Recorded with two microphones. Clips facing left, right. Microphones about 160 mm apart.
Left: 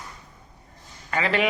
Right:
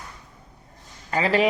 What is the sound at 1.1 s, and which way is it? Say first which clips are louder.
Speech: right 3 dB; 35° right (ahead or behind).